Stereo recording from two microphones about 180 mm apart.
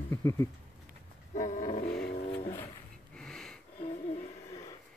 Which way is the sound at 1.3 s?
45° left (ahead or behind).